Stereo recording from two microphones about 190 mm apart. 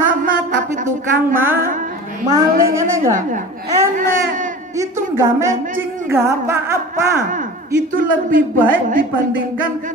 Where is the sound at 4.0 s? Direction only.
45° right (ahead or behind).